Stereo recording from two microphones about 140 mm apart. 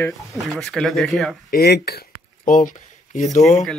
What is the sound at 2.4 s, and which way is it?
Speech, 70° left (ahead or behind).